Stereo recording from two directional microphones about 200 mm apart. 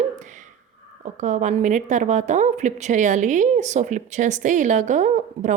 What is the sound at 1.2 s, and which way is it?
A woman's voice, 35° right (ahead or behind).